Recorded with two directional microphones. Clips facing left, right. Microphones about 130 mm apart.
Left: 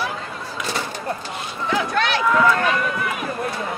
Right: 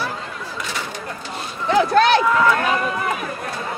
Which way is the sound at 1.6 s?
35° right (ahead or behind).